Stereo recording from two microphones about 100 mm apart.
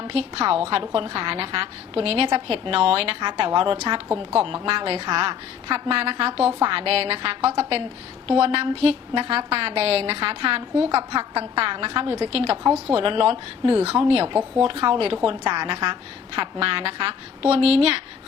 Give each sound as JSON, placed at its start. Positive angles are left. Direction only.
{"t": 0.0, "sound": "a woman's voice", "side_deg": -75}
{"t": 0.7, "sound": "a woman's voice", "side_deg": -65}
{"t": 5.7, "sound": "a woman's voice", "side_deg": -75}
{"t": 6.6, "sound": "a woman's voice", "side_deg": -65}
{"t": 9.5, "sound": "a woman's voice", "side_deg": -85}
{"t": 12.9, "sound": "a woman's voice", "side_deg": -65}
{"t": 15.3, "sound": "a woman's voice", "side_deg": -55}